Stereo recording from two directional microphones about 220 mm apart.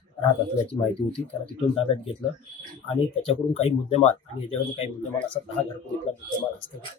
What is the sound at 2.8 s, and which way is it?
Speech, 25° left (ahead or behind).